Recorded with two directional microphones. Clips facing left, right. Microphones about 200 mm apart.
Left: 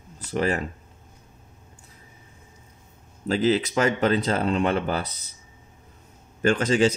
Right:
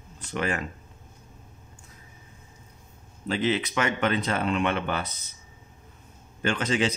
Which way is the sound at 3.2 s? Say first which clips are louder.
Left 4 dB; 40° left (ahead or behind).